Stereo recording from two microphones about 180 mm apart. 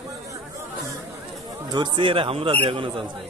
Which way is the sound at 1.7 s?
25° right (ahead or behind).